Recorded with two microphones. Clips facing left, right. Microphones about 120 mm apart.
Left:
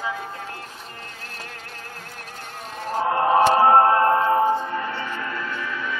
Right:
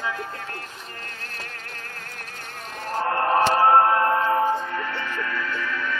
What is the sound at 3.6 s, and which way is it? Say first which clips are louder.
Music: left 2 dB; 25° left (ahead or behind).